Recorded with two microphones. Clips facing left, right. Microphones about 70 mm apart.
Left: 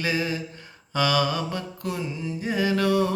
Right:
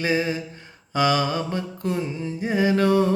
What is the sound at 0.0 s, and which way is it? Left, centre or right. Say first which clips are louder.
Mantra: right 3 dB; right.